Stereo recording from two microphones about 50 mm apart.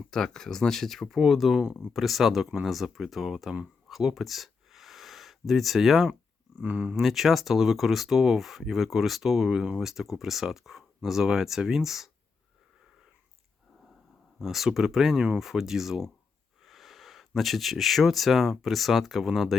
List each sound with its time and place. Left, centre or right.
0.1 s speech: centre
3.8 s a sound: centre
6.6 s speech: right
6.9 s speech: centre
14.3 s speech: centre